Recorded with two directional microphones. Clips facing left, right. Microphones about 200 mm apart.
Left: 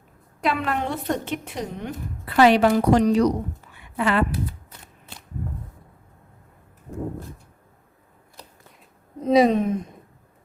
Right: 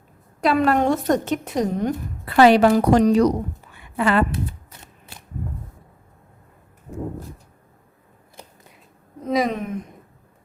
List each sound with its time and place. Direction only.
0.4 s a woman's voice: 40° right (ahead or behind)
9.2 s speech: 25° left (ahead or behind)